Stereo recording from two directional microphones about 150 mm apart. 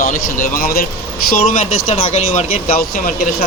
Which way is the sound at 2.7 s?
75° left (ahead or behind).